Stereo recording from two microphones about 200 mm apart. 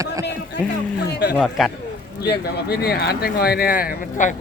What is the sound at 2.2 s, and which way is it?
Speech, 50° left (ahead or behind).